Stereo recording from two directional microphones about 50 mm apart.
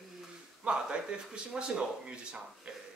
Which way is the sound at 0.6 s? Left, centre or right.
Centre.